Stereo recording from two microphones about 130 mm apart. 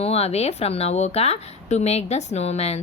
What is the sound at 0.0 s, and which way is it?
A woman's voice, 50° left (ahead or behind).